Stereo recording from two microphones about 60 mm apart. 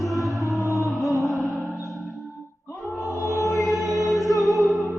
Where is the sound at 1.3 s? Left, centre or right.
Centre.